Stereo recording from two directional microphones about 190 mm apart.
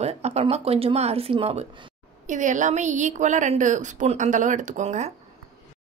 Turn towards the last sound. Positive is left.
turn(degrees=-35)  # may be behind; listen again after turning